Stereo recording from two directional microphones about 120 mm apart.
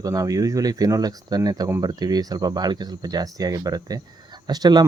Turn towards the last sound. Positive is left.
turn(degrees=-35)  # may be behind; listen again after turning